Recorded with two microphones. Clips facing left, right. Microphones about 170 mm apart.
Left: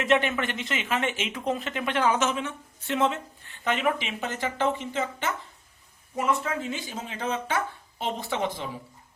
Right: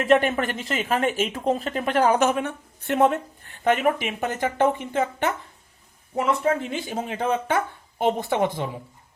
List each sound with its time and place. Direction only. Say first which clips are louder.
0.0 s speech: right 5 dB; 45° right (ahead or behind)